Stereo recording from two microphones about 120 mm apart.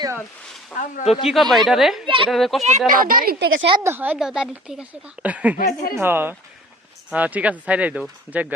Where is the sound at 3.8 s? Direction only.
20° right (ahead or behind).